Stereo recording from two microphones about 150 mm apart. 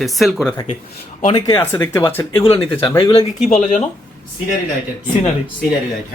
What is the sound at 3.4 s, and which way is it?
Speech, 55° left (ahead or behind).